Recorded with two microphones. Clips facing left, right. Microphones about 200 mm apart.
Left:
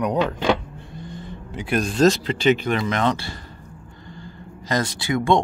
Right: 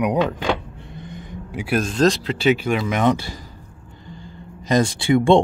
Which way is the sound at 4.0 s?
20° right (ahead or behind).